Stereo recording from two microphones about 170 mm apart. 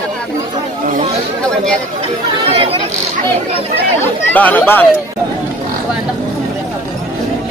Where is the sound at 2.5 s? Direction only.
35° right (ahead or behind).